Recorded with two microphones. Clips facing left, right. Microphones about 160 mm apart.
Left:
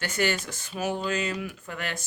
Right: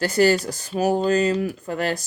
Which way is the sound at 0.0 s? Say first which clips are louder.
Right 10 dB; 35° right (ahead or behind).